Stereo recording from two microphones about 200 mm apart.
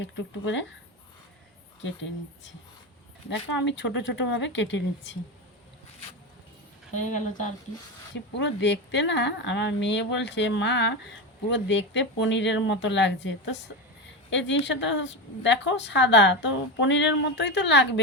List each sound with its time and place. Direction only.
0.0 s a woman's voice: 65° left (ahead or behind)
1.8 s a woman's voice: 70° left (ahead or behind)
6.9 s speech: 40° left (ahead or behind)
8.1 s a woman's voice: 65° left (ahead or behind)